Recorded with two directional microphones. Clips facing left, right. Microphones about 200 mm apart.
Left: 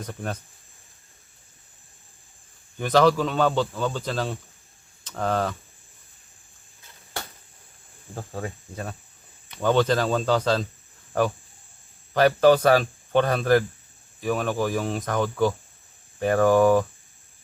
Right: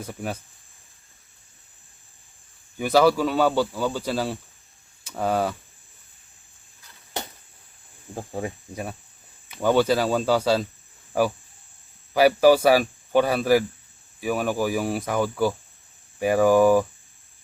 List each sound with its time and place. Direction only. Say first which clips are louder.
0.0 s speech: right 1 dB; 10° right (ahead or behind)
2.7 s speech: right 1 dB; 10° right (ahead or behind)
8.1 s speech: right 3 dB; 15° right (ahead or behind)